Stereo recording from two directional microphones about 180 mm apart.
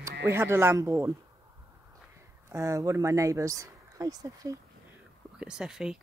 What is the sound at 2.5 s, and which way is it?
Speech, 15° right (ahead or behind).